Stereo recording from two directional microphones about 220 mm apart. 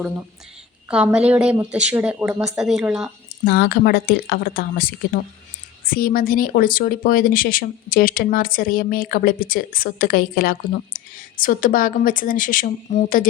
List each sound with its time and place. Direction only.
0.9 s speech: 5° right (ahead or behind)
3.4 s speech: 45° left (ahead or behind)